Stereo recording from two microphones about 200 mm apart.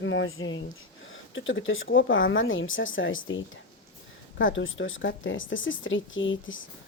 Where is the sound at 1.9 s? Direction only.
75° left (ahead or behind).